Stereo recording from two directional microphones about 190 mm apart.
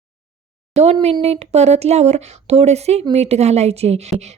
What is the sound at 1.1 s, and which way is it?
Speech, 35° right (ahead or behind).